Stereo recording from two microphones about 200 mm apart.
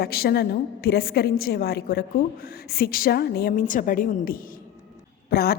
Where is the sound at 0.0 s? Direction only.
50° left (ahead or behind).